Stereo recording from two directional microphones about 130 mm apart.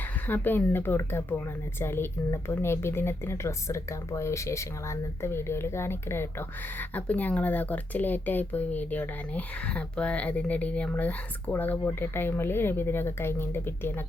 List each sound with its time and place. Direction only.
0.3 s speech: 15° left (ahead or behind)